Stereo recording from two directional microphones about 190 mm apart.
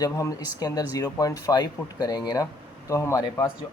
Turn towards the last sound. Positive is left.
turn(degrees=15)  # may be behind; listen again after turning